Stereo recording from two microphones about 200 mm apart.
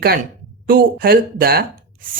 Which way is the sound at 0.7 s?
45° right (ahead or behind).